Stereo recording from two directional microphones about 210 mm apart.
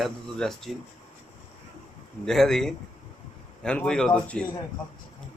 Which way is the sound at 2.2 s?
Centre (ahead or behind).